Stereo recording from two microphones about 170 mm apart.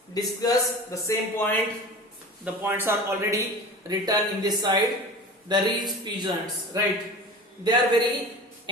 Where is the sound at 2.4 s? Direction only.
15° right (ahead or behind).